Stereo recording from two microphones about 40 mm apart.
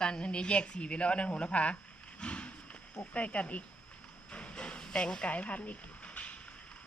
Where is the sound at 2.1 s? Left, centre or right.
Left.